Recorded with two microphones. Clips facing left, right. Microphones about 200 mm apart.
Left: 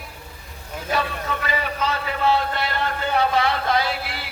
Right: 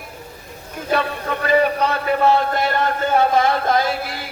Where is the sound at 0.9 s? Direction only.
55° right (ahead or behind).